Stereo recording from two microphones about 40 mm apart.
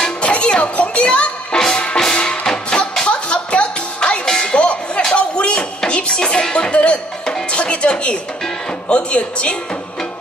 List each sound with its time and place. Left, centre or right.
0.0 s music: left
3.1 s music: left